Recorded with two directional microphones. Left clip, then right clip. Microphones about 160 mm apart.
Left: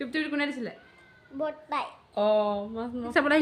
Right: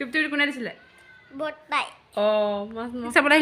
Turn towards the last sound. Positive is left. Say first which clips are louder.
# right 6 dB
turn(degrees=-20)  # may be behind; listen again after turning